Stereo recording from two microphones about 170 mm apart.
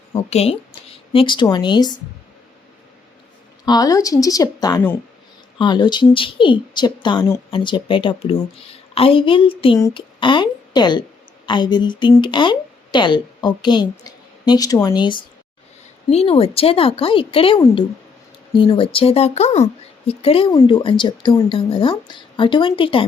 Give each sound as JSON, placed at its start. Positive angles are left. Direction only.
{"t": 0.1, "sound": "a woman's voice", "side_deg": 35}
{"t": 3.7, "sound": "a woman's voice", "side_deg": 20}